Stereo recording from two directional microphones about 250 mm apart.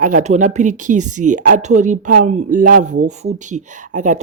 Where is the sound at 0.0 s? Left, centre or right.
Right.